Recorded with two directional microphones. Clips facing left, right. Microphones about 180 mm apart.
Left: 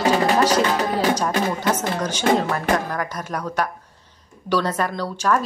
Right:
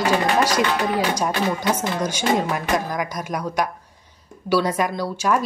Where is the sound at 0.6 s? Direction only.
40° left (ahead or behind).